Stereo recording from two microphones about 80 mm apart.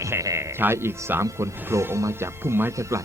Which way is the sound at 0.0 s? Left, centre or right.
Right.